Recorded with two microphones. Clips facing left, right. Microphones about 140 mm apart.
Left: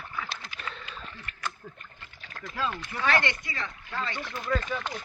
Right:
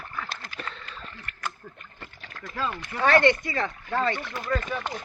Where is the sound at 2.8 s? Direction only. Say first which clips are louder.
Right 9 dB; 55° right (ahead or behind).